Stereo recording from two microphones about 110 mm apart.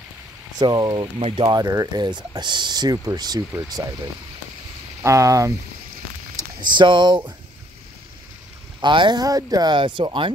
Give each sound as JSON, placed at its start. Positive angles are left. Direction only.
{"t": 0.6, "sound": "speech", "side_deg": -40}
{"t": 1.2, "sound": "speech", "side_deg": -60}
{"t": 1.5, "sound": "speech", "side_deg": -30}
{"t": 6.6, "sound": "speech", "side_deg": -45}
{"t": 8.8, "sound": "speech", "side_deg": -45}